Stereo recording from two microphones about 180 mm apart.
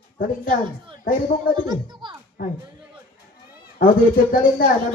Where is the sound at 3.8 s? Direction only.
50° left (ahead or behind).